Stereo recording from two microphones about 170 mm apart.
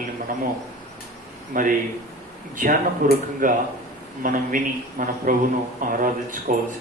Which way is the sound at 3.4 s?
50° right (ahead or behind).